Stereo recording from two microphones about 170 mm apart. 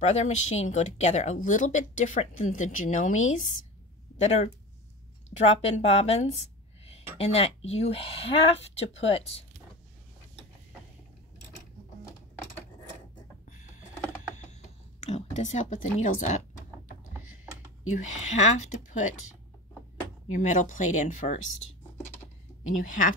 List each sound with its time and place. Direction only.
0.0 s speech: 40° left (ahead or behind)
5.5 s speech: 40° left (ahead or behind)
13.5 s a sound: 45° left (ahead or behind)
17.8 s speech: 45° left (ahead or behind)
20.2 s speech: 45° left (ahead or behind)
22.6 s speech: 50° left (ahead or behind)